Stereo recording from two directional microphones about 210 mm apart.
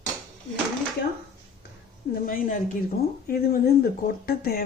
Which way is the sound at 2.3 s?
40° left (ahead or behind).